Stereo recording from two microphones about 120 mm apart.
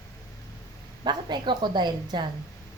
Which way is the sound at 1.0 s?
40° right (ahead or behind).